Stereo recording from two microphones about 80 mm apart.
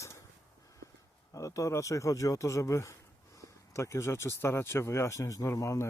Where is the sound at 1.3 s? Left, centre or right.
Left.